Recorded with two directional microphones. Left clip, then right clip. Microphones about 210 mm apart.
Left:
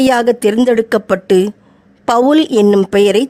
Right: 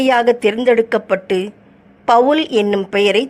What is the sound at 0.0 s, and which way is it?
A woman's voice, 40° left (ahead or behind).